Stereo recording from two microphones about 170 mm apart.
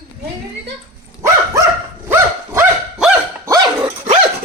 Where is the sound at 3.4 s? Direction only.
20° right (ahead or behind).